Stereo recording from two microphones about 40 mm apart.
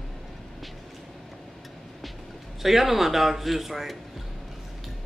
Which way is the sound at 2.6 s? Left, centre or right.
Centre.